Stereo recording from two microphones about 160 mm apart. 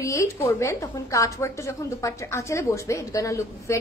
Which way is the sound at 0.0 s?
20° left (ahead or behind).